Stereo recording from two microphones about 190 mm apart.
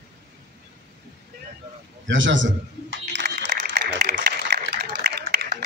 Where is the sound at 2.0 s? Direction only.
75° right (ahead or behind); by 4.6 s 60° right (ahead or behind).